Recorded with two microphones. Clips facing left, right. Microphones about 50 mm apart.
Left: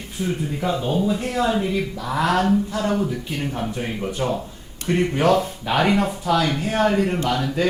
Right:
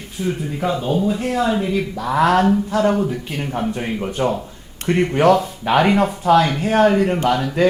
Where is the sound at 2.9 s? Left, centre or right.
Right.